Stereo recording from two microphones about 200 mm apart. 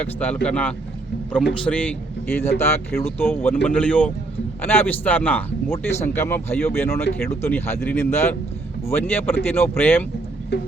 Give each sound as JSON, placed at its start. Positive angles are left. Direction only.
{"t": 0.0, "sound": "a man's voice", "side_deg": 5}
{"t": 10.5, "sound": "music", "side_deg": 55}